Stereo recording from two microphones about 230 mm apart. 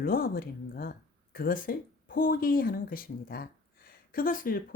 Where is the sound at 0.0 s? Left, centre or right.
Left.